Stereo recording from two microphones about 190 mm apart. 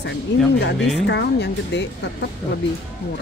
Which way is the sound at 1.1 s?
65° left (ahead or behind).